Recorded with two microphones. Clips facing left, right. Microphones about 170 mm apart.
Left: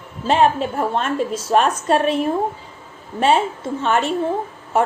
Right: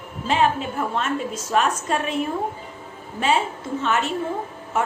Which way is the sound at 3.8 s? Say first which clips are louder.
Left 4 dB; 35° left (ahead or behind).